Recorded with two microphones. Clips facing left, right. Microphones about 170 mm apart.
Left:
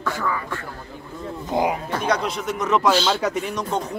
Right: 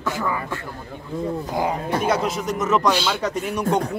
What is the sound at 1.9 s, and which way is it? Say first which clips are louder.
Speech: right 2 dB; 5° right (ahead or behind).